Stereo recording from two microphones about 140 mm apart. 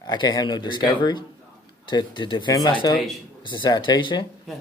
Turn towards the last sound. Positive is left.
turn(degrees=35)  # may be behind; listen again after turning